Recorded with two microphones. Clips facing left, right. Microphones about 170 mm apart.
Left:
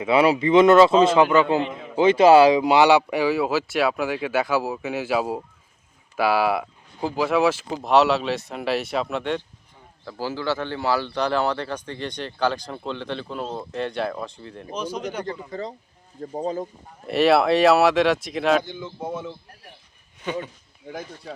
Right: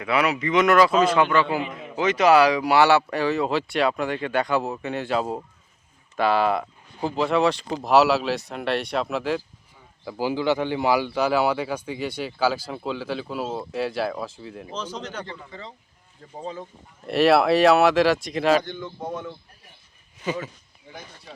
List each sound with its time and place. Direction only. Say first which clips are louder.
0.0 s speech: left 5 dB; 25° left (ahead or behind); by 9.4 s centre (ahead or behind)
10.0 s a man's voice: right 4 dB; 15° right (ahead or behind)
14.7 s speech: left 5 dB; 10° left (ahead or behind)
15.4 s speech: left 9 dB; 40° left (ahead or behind)
17.1 s speech: even; centre (ahead or behind)